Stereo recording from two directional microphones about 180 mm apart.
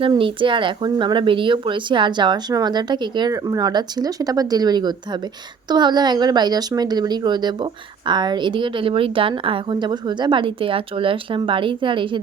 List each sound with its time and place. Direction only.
0.0 s a woman's voice: 30° right (ahead or behind)